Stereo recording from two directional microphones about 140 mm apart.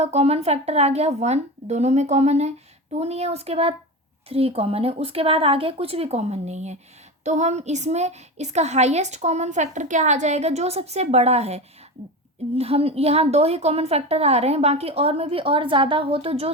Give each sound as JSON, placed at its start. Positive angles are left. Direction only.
{"t": 0.0, "sound": "a woman's voice", "side_deg": -50}